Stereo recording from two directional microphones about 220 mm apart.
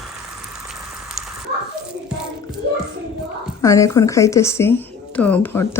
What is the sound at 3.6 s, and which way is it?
A woman's voice, 15° left (ahead or behind).